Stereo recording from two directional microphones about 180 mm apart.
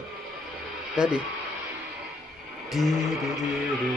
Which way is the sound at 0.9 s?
5° right (ahead or behind).